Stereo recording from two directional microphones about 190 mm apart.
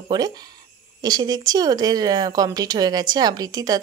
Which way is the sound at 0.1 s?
20° right (ahead or behind).